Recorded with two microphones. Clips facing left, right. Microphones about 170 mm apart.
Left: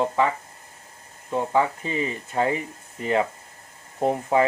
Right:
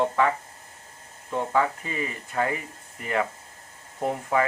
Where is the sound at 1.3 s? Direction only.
20° left (ahead or behind).